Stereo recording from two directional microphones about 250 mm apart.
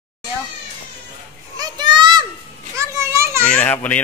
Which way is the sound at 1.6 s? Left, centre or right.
Centre.